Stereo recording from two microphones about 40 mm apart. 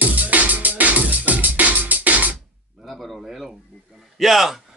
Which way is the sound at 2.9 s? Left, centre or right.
Centre.